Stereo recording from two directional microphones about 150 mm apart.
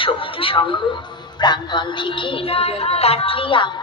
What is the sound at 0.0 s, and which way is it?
Speech, 35° left (ahead or behind).